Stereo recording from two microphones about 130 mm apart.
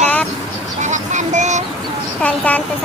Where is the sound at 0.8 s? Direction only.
70° right (ahead or behind).